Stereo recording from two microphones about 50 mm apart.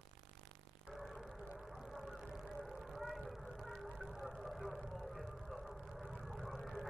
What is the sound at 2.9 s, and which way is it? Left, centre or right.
Vehicle, centre.